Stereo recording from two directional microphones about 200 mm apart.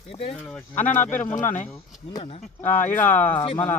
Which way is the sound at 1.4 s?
40° left (ahead or behind).